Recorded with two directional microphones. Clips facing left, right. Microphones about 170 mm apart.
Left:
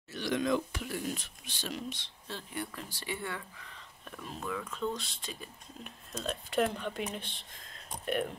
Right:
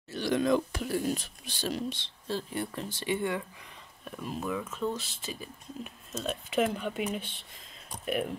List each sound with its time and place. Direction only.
0.1 s speech: 35° right (ahead or behind); by 3.7 s 20° right (ahead or behind)
4.0 s speech: 5° right (ahead or behind)